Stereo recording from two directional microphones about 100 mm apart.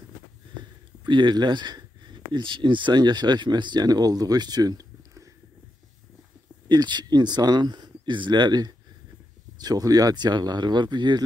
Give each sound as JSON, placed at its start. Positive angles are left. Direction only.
{"t": 1.0, "sound": "speech", "side_deg": -50}
{"t": 6.7, "sound": "speech", "side_deg": -45}